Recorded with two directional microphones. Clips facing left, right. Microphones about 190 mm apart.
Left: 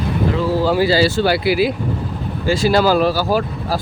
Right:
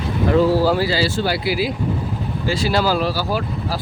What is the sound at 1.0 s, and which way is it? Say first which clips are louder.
Speech: left 5 dB; 65° left (ahead or behind).